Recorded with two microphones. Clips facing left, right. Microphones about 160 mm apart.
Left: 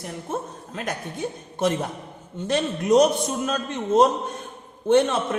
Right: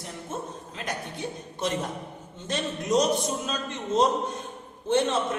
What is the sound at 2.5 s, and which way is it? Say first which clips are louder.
A man's voice: left 7 dB; 60° left (ahead or behind).